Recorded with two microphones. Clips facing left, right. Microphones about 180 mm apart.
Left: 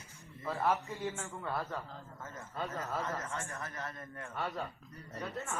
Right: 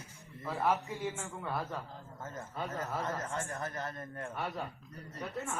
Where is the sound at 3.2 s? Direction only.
30° right (ahead or behind).